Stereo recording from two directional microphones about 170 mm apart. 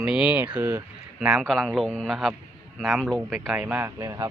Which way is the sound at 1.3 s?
Centre (ahead or behind).